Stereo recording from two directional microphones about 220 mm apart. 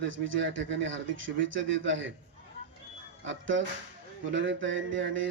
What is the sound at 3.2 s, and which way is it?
Speech, 60° right (ahead or behind).